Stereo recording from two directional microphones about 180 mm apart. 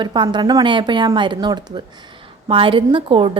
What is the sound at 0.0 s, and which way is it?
A woman's voice, 25° right (ahead or behind).